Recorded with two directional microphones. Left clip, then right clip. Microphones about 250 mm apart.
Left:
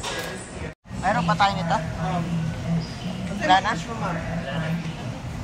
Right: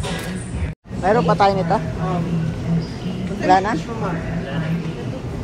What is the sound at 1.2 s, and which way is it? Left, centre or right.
Speech, centre.